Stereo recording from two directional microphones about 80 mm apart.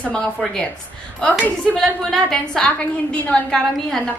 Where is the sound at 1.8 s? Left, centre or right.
Centre.